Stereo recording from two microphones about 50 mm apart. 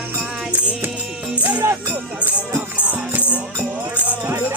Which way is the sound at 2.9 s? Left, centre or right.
Right.